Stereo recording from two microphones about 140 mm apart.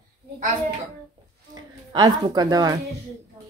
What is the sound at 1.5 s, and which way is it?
A woman's voice, 30° right (ahead or behind).